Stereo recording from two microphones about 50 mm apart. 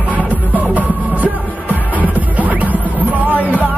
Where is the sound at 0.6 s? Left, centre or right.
Right.